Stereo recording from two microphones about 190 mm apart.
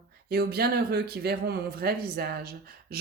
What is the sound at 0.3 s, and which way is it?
A woman's voice, 55° right (ahead or behind).